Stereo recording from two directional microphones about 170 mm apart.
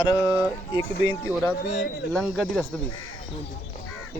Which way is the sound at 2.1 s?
5° left (ahead or behind).